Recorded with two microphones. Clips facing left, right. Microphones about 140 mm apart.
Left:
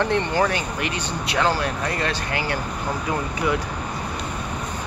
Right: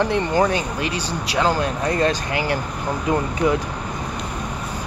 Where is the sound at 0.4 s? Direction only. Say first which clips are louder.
Right 3 dB; 25° right (ahead or behind).